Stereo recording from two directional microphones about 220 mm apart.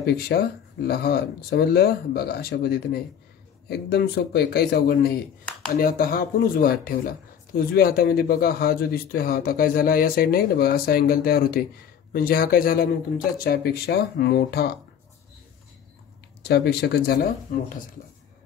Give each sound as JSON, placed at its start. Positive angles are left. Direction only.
{"t": 0.0, "sound": "speech", "side_deg": 45}
{"t": 16.4, "sound": "speech", "side_deg": 50}